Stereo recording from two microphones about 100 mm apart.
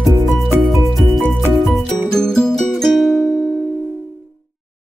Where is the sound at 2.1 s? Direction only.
5° left (ahead or behind).